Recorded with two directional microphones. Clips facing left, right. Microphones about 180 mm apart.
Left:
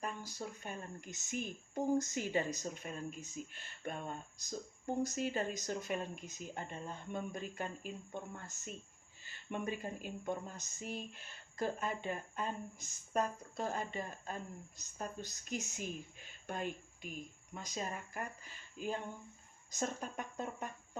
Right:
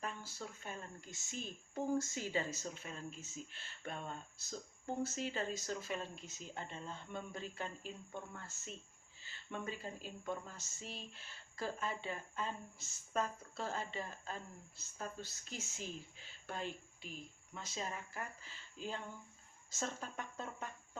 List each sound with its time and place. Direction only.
0.0 s speech: 15° left (ahead or behind)